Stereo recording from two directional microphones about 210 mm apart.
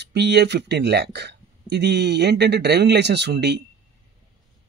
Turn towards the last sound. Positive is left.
turn(degrees=-50)  # may be behind; listen again after turning